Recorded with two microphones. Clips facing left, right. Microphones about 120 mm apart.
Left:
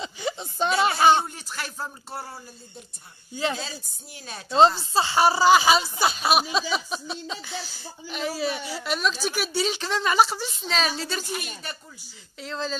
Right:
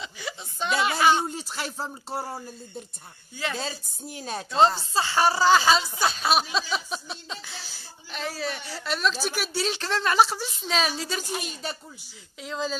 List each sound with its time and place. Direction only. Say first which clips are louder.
0.0 s a sound: left 6 dB; 25° left (ahead or behind)
1.3 s speech: right 3 dB; 25° right (ahead or behind)
3.6 s speech: right 4 dB; 40° right (ahead or behind)
4.9 s a woman's voice: left 2 dB; 20° left (ahead or behind); by 11.2 s 5° right (ahead or behind)
11.2 s speech: right 2 dB; 30° right (ahead or behind)
12.4 s speech: right 1 dB; 5° right (ahead or behind)